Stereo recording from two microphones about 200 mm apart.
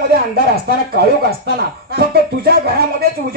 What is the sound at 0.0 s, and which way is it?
Speech, 50° right (ahead or behind).